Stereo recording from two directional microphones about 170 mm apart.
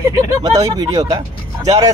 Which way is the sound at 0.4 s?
20° right (ahead or behind).